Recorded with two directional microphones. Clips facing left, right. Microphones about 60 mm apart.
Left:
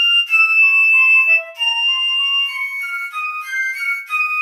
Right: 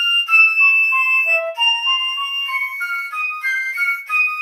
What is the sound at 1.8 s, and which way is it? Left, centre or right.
Music, right.